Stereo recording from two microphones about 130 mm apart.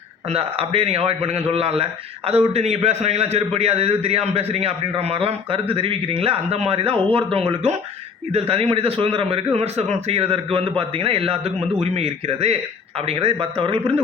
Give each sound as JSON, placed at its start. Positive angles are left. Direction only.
{"t": 0.3, "sound": "a man's voice", "side_deg": -50}